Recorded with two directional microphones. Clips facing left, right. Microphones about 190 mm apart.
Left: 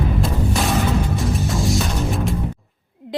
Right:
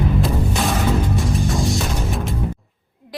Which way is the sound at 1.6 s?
Centre (ahead or behind).